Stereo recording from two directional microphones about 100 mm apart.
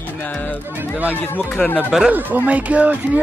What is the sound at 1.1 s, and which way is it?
Speech, 20° left (ahead or behind).